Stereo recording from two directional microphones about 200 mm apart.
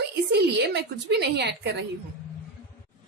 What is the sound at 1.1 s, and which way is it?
Speech, 55° right (ahead or behind).